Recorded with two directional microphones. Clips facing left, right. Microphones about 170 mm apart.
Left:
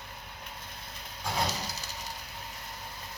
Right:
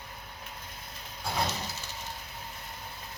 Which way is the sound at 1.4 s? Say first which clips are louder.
Even; 35° left (ahead or behind).